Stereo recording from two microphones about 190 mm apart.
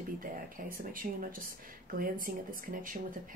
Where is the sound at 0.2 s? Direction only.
45° right (ahead or behind).